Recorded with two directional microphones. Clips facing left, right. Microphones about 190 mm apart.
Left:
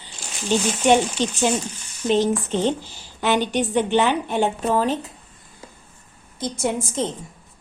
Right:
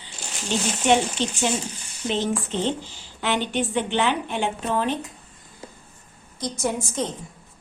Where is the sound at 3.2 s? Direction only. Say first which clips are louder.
Left 4 dB; 45° left (ahead or behind).